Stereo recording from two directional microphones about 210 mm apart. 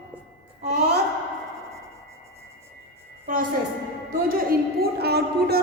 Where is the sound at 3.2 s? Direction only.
40° right (ahead or behind).